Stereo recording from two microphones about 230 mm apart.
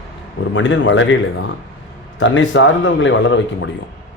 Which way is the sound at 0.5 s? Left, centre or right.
Left.